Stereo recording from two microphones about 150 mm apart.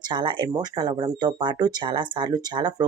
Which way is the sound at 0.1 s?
30° right (ahead or behind).